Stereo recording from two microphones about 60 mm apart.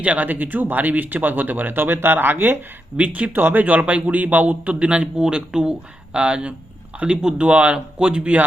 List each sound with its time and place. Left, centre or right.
0.0 s speech: right
3.0 s a man's voice: right